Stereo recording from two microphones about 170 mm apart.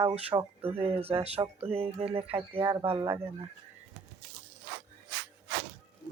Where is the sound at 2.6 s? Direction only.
15° right (ahead or behind).